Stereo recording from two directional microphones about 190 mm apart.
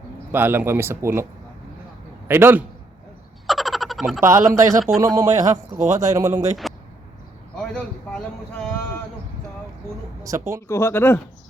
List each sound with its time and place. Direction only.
0.3 s a man's voice: 10° right (ahead or behind)
3.4 s frog: centre (ahead or behind)
4.2 s speech: 15° right (ahead or behind)
7.6 s a sound: 5° left (ahead or behind)
10.2 s speech: 15° right (ahead or behind)
10.7 s speech: 15° left (ahead or behind)